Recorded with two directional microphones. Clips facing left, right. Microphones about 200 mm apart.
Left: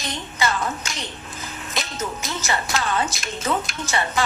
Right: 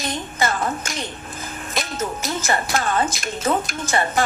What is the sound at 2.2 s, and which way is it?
A woman's voice, 45° right (ahead or behind).